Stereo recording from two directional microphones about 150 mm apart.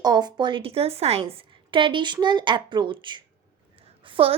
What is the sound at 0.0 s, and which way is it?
A woman's voice, 30° right (ahead or behind).